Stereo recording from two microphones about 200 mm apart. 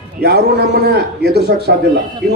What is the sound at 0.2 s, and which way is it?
A man's voice, 55° right (ahead or behind).